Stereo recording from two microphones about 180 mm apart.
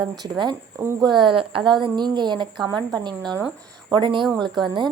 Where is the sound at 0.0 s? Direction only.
25° right (ahead or behind).